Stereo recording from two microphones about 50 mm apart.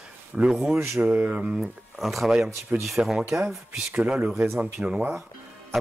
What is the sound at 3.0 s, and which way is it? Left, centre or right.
Speech, centre.